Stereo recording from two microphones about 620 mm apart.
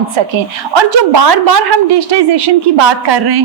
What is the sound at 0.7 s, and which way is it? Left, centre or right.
A woman's voice, right.